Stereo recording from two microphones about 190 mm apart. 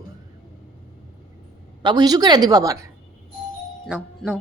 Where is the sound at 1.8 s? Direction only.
20° right (ahead or behind).